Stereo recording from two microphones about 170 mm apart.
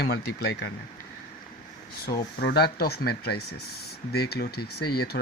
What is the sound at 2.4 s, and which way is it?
Speech, 75° left (ahead or behind).